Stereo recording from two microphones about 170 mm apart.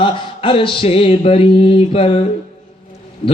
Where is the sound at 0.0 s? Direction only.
30° left (ahead or behind).